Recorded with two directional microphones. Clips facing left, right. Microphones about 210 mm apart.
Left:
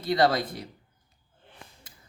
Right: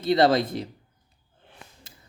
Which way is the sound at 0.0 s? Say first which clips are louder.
Right 4 dB; 25° right (ahead or behind).